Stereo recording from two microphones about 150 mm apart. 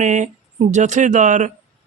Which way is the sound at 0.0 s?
50° right (ahead or behind).